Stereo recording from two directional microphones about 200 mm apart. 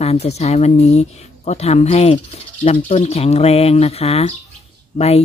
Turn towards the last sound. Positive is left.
turn(degrees=30)  # may be behind; listen again after turning